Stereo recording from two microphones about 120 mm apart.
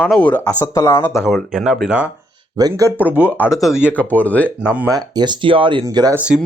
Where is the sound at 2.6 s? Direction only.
30° right (ahead or behind).